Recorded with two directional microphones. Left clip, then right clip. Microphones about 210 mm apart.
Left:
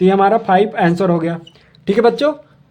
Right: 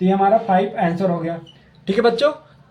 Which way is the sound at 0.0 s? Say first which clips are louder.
Left 4 dB; 45° left (ahead or behind).